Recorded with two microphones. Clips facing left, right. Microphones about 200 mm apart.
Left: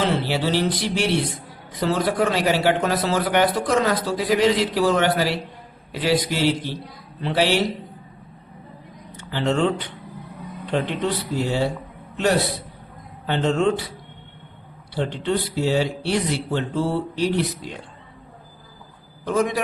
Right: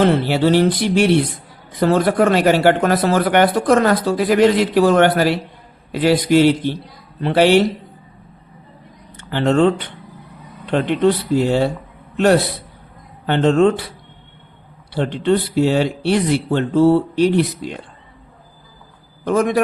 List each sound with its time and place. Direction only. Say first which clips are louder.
0.0 s speech: right 7 dB; 55° right (ahead or behind)
9.1 s a man's voice: right 6 dB; 60° right (ahead or behind)
14.9 s speech: right 6 dB; 60° right (ahead or behind)
19.2 s speech: right 6 dB; 60° right (ahead or behind)